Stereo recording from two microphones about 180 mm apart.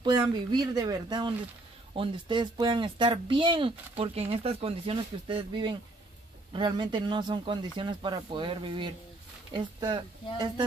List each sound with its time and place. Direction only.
0.0 s speech: 25° right (ahead or behind)